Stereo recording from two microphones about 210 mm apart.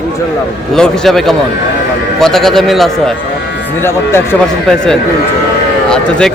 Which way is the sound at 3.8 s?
10° left (ahead or behind).